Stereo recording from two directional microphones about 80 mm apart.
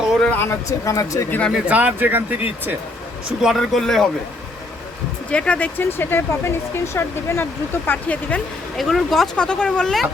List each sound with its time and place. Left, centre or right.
0.3 s speech: left
0.7 s speech: left
1.3 s speech: centre
1.7 s speech: right
3.4 s speech: centre
5.3 s speech: centre; by 7.4 s left
7.9 s speech: centre
8.8 s speech: centre